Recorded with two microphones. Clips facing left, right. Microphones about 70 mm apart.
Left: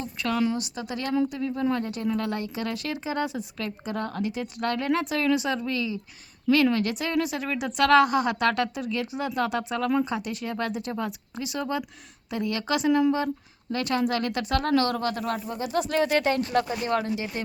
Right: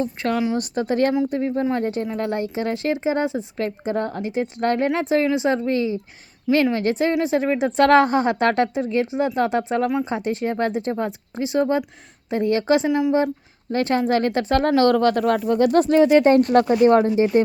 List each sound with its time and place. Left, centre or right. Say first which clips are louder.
0.0 s a woman's voice: right 4 dB; right
12.9 s a woman's voice: right 1 dB; centre
13.1 s a woman's voice: right 8 dB; right
15.4 s speech: right 11 dB; right
15.9 s speech: right 8 dB; centre
16.4 s a woman's voice: right 11 dB; right